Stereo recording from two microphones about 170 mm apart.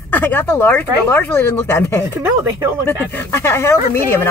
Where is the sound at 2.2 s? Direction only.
15° right (ahead or behind).